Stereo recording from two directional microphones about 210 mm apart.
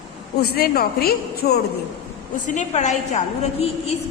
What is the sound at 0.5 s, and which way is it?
A woman's voice, 45° left (ahead or behind).